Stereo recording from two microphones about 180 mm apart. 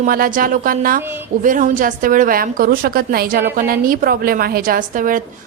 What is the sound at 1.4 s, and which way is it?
A woman's voice, 45° right (ahead or behind).